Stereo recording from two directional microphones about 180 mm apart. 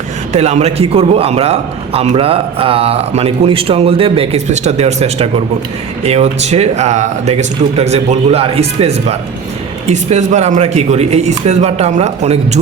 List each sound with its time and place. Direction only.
0.3 s a man's voice: 35° right (ahead or behind)